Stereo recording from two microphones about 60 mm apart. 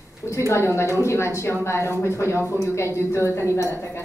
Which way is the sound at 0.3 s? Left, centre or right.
Left.